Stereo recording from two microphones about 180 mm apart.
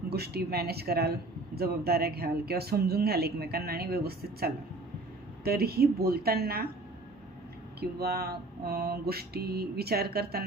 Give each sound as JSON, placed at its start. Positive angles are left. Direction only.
{"t": 0.1, "sound": "speech", "side_deg": -60}
{"t": 7.8, "sound": "speech", "side_deg": -60}